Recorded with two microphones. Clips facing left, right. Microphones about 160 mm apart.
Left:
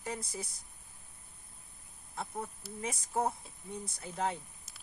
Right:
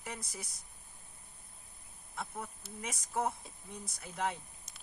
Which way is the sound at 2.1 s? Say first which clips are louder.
Left 3 dB; 25° left (ahead or behind).